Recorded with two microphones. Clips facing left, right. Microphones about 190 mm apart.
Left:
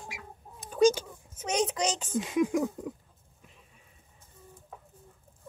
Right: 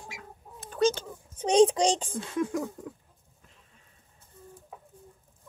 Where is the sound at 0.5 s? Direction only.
10° left (ahead or behind).